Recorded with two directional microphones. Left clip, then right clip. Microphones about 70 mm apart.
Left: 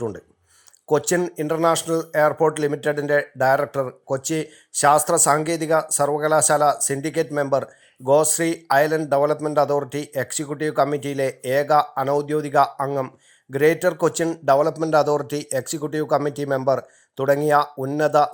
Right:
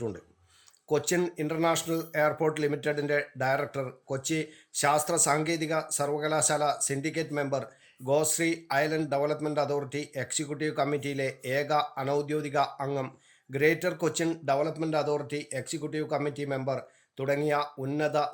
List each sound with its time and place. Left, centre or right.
0.9 s speech: left
7.3 s speech: centre
7.5 s speech: left
12.9 s speech: centre
13.5 s speech: left
14.9 s speech: left
17.7 s speech: centre
18.0 s speech: left